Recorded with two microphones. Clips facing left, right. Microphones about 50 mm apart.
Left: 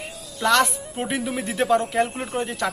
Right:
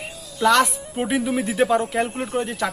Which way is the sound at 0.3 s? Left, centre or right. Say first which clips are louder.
Right 2 dB; centre.